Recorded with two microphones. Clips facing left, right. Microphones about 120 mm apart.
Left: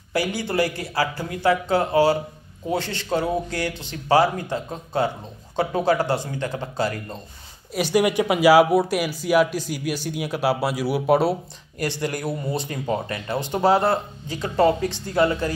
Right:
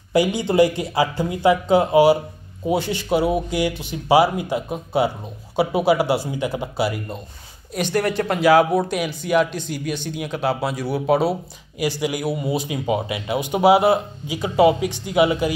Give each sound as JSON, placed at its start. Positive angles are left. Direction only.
{"t": 0.1, "sound": "speech", "side_deg": -20}
{"t": 7.7, "sound": "speech", "side_deg": 5}